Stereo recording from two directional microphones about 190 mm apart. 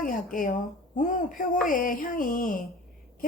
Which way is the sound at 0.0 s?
45° left (ahead or behind).